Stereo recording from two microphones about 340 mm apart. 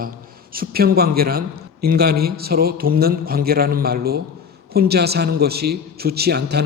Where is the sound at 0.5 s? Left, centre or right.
Right.